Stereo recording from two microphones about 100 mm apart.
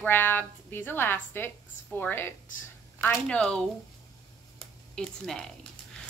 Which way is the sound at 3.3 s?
10° left (ahead or behind).